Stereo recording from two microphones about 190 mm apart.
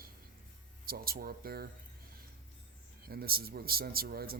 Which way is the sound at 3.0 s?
55° right (ahead or behind).